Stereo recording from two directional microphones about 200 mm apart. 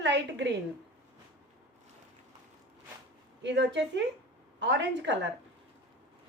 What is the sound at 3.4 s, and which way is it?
A woman's voice, 60° right (ahead or behind).